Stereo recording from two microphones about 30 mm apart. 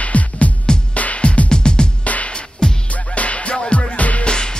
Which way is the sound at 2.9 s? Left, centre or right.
Left.